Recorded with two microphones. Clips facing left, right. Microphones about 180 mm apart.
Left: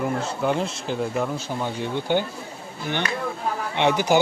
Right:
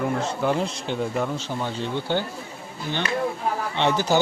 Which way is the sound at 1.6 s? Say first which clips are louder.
Left 2 dB; 15° left (ahead or behind).